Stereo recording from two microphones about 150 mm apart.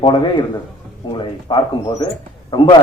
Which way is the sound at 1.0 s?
30° left (ahead or behind).